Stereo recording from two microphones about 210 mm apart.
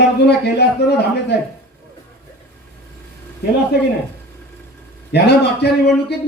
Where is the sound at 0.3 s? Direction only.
50° left (ahead or behind).